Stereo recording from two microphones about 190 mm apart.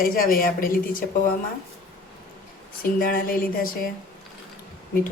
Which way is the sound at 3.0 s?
50° left (ahead or behind).